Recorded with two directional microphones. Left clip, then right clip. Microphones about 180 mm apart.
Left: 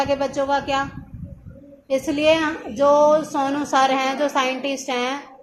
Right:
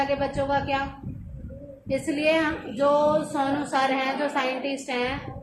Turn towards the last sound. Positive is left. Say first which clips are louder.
# left 4 dB
turn(degrees=25)  # may be behind; listen again after turning